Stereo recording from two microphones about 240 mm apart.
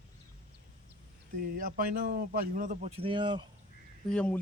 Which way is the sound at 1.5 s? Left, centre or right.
Right.